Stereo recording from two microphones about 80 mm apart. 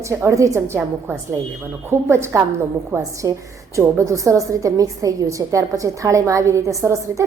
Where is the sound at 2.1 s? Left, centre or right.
Right.